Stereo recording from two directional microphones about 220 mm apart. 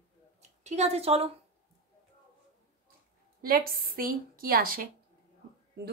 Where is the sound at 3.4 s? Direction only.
40° right (ahead or behind).